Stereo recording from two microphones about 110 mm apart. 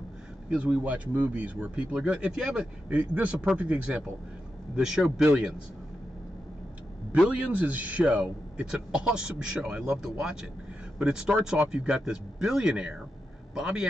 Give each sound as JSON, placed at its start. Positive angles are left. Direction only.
{"t": 0.5, "sound": "speech", "side_deg": -10}
{"t": 7.2, "sound": "speech", "side_deg": -10}